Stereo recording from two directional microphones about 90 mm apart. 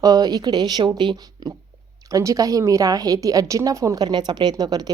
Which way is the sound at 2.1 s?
40° right (ahead or behind).